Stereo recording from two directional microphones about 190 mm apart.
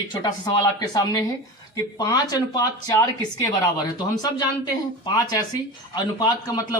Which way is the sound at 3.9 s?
20° left (ahead or behind).